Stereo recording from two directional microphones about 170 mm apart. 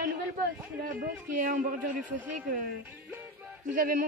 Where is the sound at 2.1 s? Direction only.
10° right (ahead or behind).